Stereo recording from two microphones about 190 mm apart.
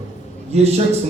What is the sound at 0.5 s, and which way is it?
Speech, 35° right (ahead or behind).